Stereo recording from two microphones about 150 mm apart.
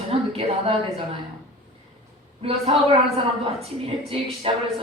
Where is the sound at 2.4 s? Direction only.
35° right (ahead or behind).